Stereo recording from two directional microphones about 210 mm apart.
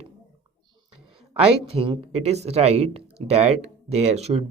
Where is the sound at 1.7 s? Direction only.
25° right (ahead or behind).